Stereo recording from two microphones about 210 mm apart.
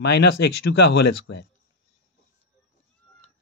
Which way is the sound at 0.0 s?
50° left (ahead or behind).